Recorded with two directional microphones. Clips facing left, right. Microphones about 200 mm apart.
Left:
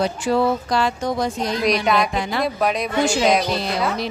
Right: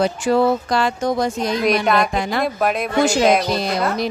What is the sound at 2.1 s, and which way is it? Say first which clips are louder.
Speech: right 2 dB; 50° right (ahead or behind).